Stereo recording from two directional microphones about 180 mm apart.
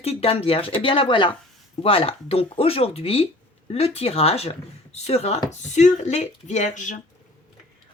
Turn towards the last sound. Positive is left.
turn(degrees=45)  # may be behind; listen again after turning